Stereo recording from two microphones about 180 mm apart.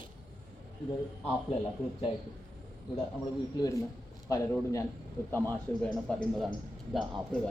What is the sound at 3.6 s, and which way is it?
Speech, 15° left (ahead or behind).